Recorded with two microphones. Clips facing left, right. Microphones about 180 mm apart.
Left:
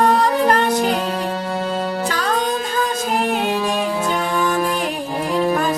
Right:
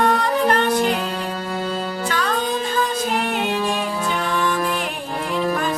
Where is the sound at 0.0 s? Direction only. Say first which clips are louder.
Left 3 dB; 35° left (ahead or behind).